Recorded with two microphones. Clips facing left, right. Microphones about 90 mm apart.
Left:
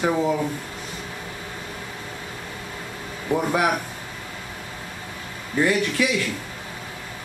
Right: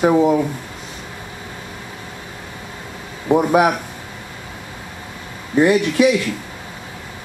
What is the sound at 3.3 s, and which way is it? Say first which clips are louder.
Speech: right 7 dB; 20° right (ahead or behind).